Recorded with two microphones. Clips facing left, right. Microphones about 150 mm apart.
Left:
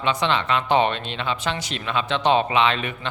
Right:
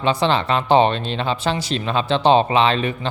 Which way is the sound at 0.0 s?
35° right (ahead or behind).